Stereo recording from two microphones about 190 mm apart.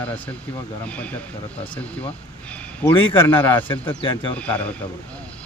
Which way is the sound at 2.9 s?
25° left (ahead or behind).